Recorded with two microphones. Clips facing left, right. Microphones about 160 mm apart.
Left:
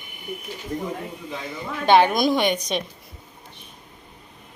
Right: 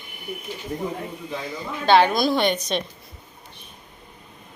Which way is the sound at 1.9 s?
15° left (ahead or behind).